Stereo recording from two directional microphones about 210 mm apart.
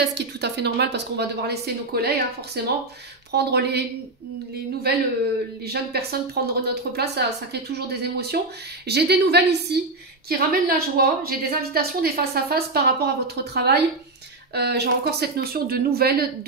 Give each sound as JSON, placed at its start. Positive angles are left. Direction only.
{"t": 0.0, "sound": "a woman's voice", "side_deg": -55}
{"t": 4.9, "sound": "a woman's voice", "side_deg": -50}